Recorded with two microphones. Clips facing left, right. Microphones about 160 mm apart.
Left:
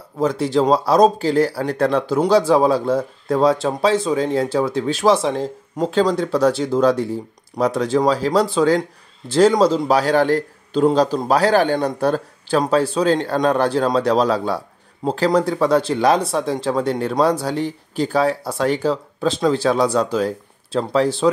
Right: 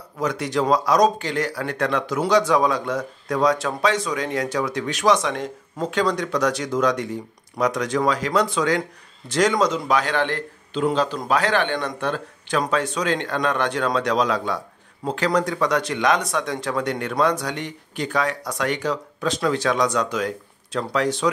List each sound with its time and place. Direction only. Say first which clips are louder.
0.2 s speech: left 5 dB; 30° left (ahead or behind)